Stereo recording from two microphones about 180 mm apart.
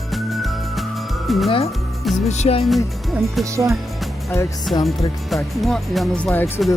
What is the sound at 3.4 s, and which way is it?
Speech, 15° right (ahead or behind).